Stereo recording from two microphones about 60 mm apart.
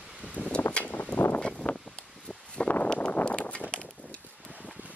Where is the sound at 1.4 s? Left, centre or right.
Centre.